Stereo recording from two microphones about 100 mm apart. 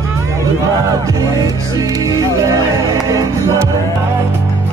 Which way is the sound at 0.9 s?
35° right (ahead or behind).